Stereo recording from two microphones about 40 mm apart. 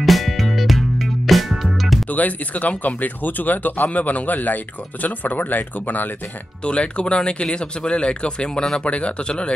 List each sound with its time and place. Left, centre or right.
0.0 s music: centre
2.0 s speech: left
6.6 s speech: left